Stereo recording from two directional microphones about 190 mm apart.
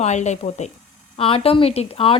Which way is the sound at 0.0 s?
35° left (ahead or behind).